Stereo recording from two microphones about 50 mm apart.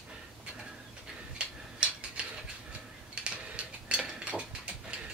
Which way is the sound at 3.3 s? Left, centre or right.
Right.